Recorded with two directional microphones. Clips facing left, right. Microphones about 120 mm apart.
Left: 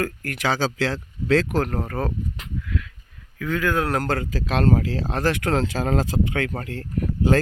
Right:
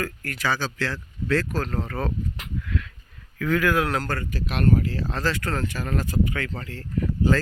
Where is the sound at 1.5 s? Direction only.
55° left (ahead or behind).